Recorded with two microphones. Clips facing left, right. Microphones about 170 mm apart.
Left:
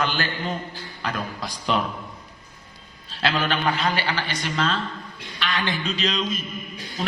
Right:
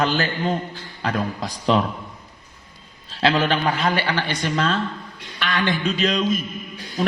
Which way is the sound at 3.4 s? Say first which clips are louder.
Right 3 dB; 45° right (ahead or behind).